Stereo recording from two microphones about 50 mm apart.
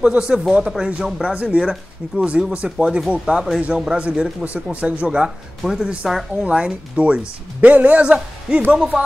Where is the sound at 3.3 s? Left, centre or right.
Right.